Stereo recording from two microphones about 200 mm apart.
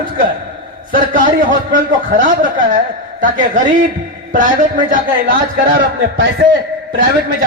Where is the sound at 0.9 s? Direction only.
40° right (ahead or behind).